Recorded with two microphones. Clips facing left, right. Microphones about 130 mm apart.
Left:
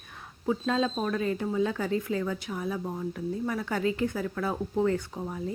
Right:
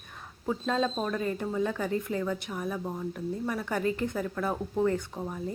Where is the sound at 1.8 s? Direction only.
15° right (ahead or behind).